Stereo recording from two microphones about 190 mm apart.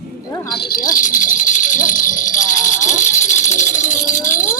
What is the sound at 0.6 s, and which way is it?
Jingle bell, 50° left (ahead or behind).